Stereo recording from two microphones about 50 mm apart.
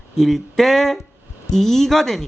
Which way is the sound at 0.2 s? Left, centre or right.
Centre.